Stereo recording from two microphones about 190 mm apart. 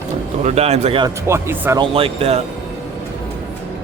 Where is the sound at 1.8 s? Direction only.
30° right (ahead or behind).